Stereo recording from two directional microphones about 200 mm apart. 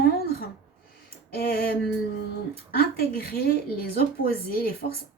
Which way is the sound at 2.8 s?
50° left (ahead or behind).